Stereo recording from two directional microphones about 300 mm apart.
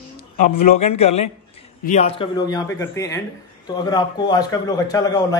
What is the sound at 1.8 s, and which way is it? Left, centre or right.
A man's voice, left.